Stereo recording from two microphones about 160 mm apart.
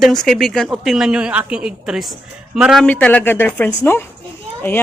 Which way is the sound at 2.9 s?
10° left (ahead or behind).